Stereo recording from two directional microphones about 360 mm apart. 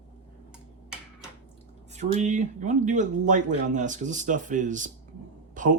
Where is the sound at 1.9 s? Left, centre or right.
Centre.